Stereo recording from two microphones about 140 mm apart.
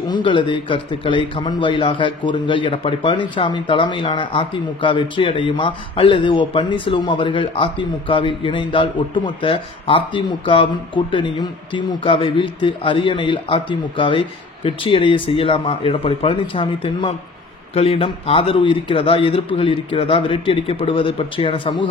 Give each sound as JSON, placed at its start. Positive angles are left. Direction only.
{"t": 0.1, "sound": "a man's voice", "side_deg": 35}